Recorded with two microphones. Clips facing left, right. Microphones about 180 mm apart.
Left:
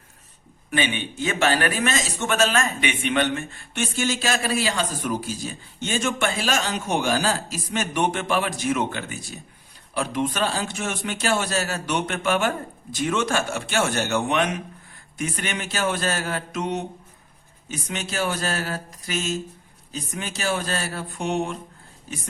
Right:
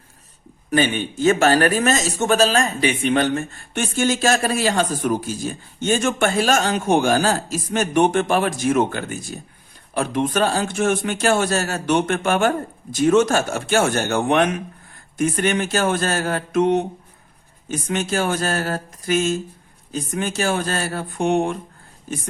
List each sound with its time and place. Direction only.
0.7 s a man's voice: 40° right (ahead or behind)